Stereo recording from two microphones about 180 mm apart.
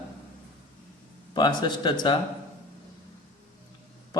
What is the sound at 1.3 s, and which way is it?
Speech, 25° left (ahead or behind).